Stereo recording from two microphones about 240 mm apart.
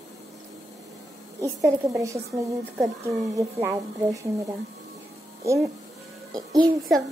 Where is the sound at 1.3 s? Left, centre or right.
Centre.